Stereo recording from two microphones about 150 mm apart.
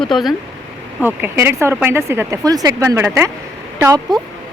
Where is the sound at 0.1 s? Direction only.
Centre (ahead or behind).